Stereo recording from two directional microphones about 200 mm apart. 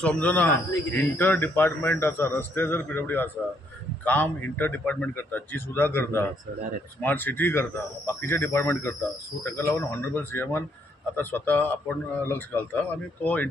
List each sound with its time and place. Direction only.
0.0 s a man's voice: 5° left (ahead or behind)